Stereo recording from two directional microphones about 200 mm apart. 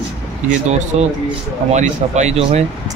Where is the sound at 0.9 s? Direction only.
35° right (ahead or behind).